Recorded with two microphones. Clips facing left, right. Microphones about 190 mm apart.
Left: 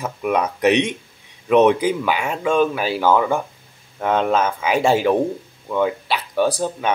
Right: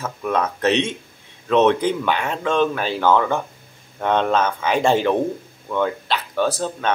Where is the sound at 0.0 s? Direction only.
15° left (ahead or behind).